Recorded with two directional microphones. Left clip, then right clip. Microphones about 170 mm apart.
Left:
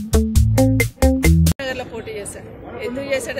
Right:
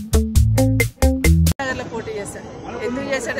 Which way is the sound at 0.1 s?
Centre (ahead or behind).